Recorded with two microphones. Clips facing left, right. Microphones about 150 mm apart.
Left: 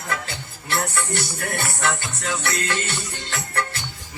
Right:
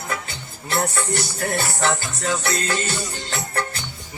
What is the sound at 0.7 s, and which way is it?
Music, 25° right (ahead or behind).